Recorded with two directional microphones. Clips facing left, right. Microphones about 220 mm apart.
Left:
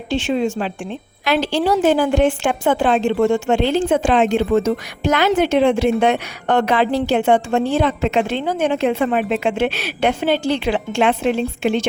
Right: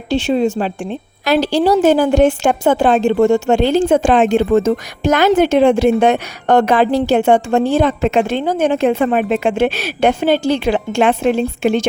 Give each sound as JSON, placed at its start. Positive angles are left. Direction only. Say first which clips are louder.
{"t": 0.1, "sound": "a woman's voice", "louder": "right 4 dB", "side_deg": -35}